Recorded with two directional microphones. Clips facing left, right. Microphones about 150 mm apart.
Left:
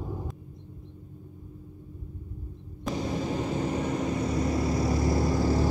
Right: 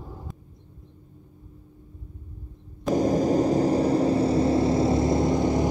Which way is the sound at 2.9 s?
40° right (ahead or behind).